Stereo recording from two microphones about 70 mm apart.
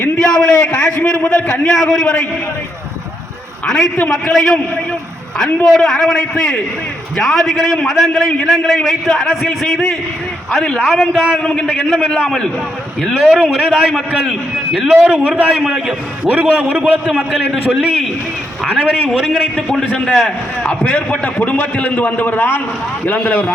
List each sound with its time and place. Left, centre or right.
0.2 s a sound: centre
1.3 s a man's voice: centre
4.1 s a man's voice: centre
5.6 s a man's voice: centre
11.7 s a man's voice: centre; by 23.5 s left